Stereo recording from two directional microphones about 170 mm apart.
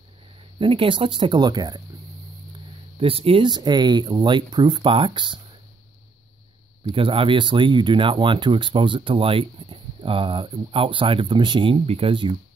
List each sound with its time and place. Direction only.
0.6 s speech: 30° right (ahead or behind)
3.0 s speech: 35° right (ahead or behind)
6.8 s speech: 30° right (ahead or behind)